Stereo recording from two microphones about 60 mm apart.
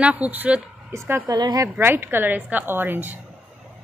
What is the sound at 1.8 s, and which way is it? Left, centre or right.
A woman's voice, right.